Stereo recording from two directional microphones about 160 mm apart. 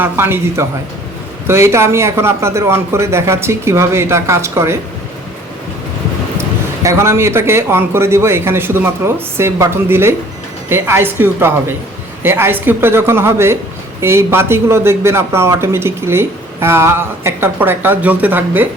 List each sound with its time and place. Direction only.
0.0 s a man's voice: 15° right (ahead or behind)
6.8 s a man's voice: 15° right (ahead or behind)